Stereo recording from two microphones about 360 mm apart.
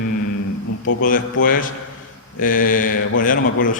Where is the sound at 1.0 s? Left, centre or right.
Left.